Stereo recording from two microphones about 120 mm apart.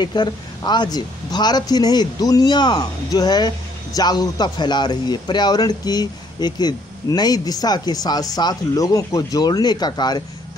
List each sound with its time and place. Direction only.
0.0 s speech: 35° left (ahead or behind)